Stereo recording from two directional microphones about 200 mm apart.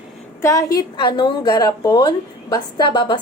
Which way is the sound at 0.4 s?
15° left (ahead or behind).